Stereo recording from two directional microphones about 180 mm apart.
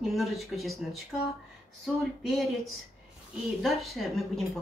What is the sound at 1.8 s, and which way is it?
Speech, centre (ahead or behind).